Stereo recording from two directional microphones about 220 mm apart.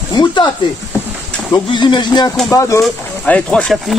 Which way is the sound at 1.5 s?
20° left (ahead or behind).